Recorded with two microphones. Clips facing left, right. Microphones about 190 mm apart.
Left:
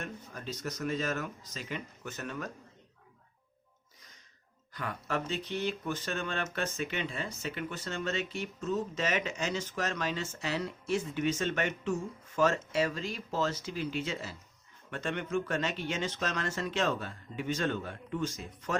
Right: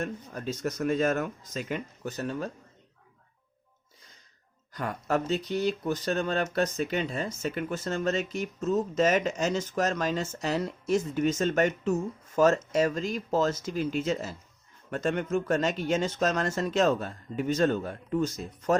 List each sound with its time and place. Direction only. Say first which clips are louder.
0.0 s speech: right 7 dB; 45° right (ahead or behind)
4.7 s speech: right 6 dB; 45° right (ahead or behind)